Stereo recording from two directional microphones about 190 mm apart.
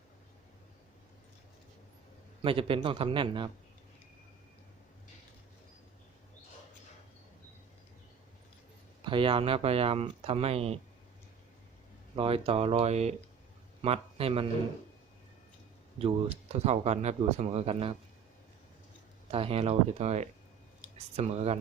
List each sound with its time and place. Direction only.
2.4 s a man's voice: 30° right (ahead or behind)
9.0 s speech: 25° right (ahead or behind)
12.1 s a man's voice: 30° right (ahead or behind)
16.0 s speech: 30° right (ahead or behind)
19.3 s speech: 30° right (ahead or behind)